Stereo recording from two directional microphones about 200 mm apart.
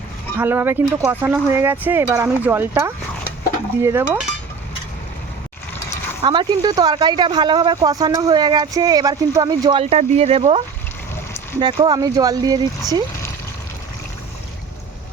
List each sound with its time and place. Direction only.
0.3 s speech: 10° right (ahead or behind)
6.2 s speech: 25° right (ahead or behind)
11.6 s speech: 20° right (ahead or behind)